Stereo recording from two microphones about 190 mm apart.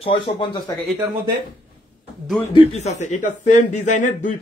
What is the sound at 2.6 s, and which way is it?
A man's voice, 35° left (ahead or behind).